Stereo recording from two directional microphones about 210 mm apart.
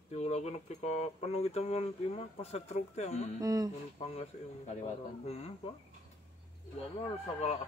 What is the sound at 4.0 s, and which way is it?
Speech, 30° left (ahead or behind).